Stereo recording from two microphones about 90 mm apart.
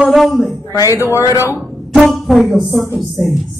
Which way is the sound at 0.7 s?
35° left (ahead or behind).